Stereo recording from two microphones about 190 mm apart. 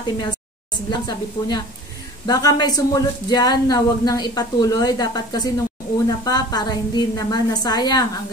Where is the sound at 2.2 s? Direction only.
20° left (ahead or behind).